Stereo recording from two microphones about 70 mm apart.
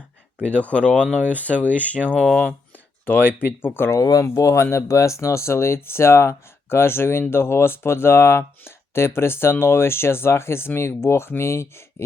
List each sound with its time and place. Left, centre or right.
0.4 s speech: centre; by 4.0 s left
4.0 s speech: left